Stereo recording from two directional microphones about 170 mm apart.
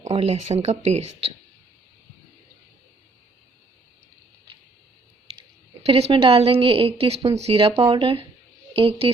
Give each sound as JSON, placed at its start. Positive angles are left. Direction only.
{"t": 0.0, "sound": "a woman's voice", "side_deg": -40}
{"t": 5.4, "sound": "a woman's voice", "side_deg": -35}